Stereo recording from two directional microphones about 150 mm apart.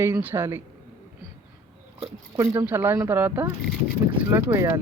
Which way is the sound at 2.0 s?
20° right (ahead or behind).